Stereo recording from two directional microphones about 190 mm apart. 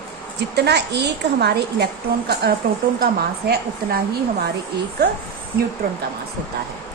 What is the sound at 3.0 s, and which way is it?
A woman's voice, 55° right (ahead or behind).